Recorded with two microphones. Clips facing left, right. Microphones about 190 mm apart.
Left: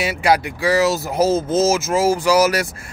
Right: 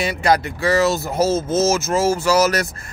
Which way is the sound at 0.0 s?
10° left (ahead or behind).